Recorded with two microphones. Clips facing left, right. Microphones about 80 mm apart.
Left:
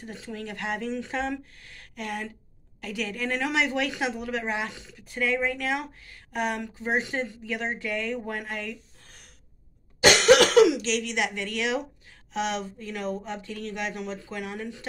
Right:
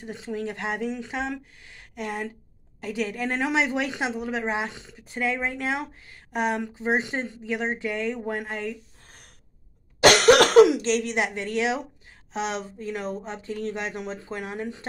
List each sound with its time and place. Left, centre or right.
0.0 s a woman's voice: centre
9.9 s a woman's voice: right